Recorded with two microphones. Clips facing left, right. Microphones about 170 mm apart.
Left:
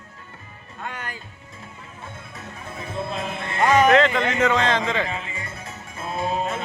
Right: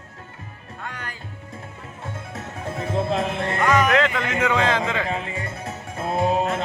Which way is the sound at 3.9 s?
5° right (ahead or behind).